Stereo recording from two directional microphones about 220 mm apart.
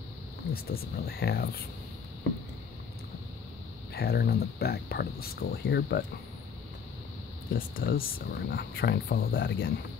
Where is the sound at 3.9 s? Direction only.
45° left (ahead or behind).